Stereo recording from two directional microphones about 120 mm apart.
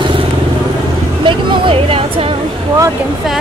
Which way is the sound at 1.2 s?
45° right (ahead or behind).